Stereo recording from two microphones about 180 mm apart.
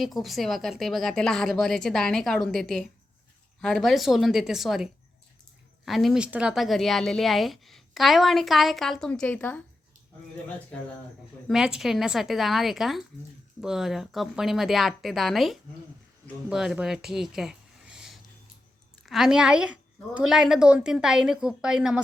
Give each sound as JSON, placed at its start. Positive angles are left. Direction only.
{"t": 0.0, "sound": "speech", "side_deg": 0}
{"t": 11.4, "sound": "speech", "side_deg": 0}